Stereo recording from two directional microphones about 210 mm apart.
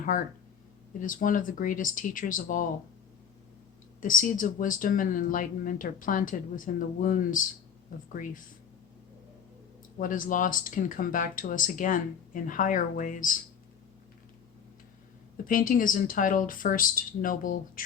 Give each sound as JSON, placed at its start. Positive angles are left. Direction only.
{"t": 1.0, "sound": "speech", "side_deg": 40}
{"t": 4.0, "sound": "speech", "side_deg": 40}
{"t": 10.0, "sound": "speech", "side_deg": 40}
{"t": 15.4, "sound": "speech", "side_deg": 40}